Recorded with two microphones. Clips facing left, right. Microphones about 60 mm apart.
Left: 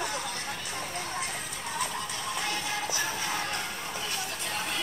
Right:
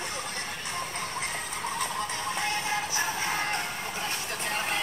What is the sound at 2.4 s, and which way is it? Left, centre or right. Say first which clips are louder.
Music: right 2 dB; right.